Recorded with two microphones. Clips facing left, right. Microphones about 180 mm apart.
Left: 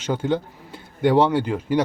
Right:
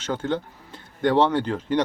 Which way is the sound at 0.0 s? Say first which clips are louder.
Left 3 dB; 15° left (ahead or behind).